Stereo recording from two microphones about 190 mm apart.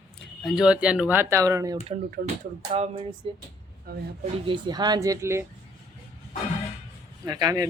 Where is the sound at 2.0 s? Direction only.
45° right (ahead or behind).